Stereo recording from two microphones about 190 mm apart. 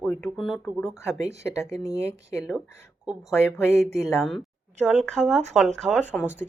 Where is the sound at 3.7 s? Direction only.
35° right (ahead or behind).